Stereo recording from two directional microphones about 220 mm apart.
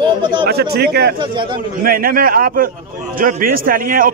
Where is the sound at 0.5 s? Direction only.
45° right (ahead or behind).